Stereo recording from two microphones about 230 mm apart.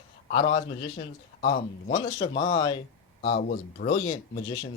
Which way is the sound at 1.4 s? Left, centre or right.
Left.